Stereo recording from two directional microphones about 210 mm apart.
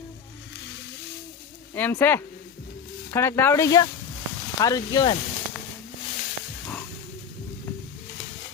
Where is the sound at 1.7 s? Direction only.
10° left (ahead or behind).